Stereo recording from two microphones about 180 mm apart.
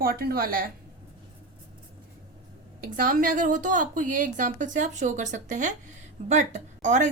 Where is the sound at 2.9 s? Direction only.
50° right (ahead or behind).